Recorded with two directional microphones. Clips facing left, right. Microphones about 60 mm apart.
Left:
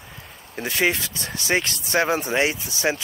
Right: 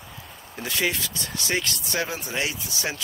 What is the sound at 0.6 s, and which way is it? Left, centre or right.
Speech, left.